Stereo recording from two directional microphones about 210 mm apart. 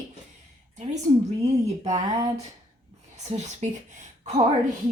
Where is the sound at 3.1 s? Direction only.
35° right (ahead or behind).